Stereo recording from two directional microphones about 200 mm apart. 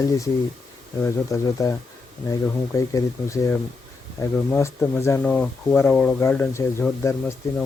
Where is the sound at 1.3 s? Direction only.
15° left (ahead or behind).